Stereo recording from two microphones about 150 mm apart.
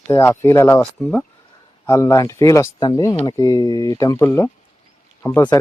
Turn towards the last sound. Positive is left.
turn(degrees=15)  # may be behind; listen again after turning